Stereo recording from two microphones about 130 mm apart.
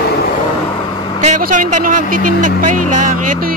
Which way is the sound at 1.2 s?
70° right (ahead or behind).